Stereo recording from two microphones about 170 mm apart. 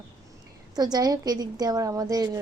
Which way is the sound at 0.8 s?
25° right (ahead or behind).